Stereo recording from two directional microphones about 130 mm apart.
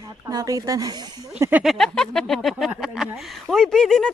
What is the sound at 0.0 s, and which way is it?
Speech, 30° right (ahead or behind).